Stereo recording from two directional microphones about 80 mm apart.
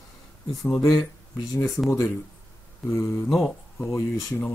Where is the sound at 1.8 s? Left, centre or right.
Left.